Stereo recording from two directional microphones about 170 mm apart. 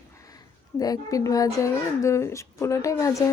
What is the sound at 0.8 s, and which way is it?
Speech, 20° left (ahead or behind).